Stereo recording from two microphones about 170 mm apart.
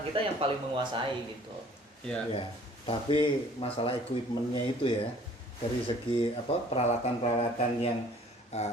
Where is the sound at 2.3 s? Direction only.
30° left (ahead or behind).